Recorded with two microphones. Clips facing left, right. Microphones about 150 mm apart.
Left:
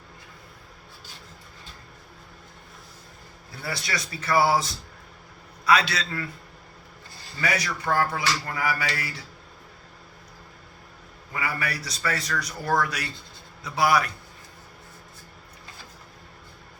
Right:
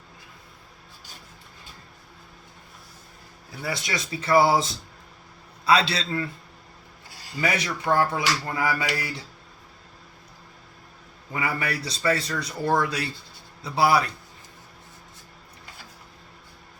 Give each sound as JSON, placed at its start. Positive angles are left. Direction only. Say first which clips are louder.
{"t": 3.6, "sound": "a man's voice", "louder": "right 2 dB", "side_deg": -20}
{"t": 7.4, "sound": "a man's voice", "louder": "right 2 dB", "side_deg": -25}
{"t": 11.3, "sound": "a man's voice", "louder": "right 2 dB", "side_deg": -25}